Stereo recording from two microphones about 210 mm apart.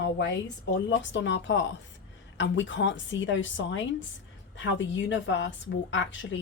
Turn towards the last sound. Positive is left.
turn(degrees=60)  # may be behind; listen again after turning